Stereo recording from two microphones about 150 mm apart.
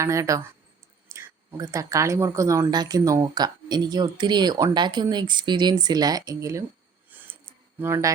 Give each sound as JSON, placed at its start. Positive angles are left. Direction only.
{"t": 0.0, "sound": "speech", "side_deg": -20}
{"t": 7.8, "sound": "speech", "side_deg": -15}